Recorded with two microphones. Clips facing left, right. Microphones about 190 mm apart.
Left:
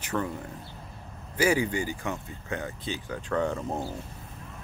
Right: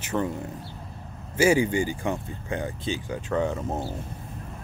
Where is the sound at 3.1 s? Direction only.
10° right (ahead or behind).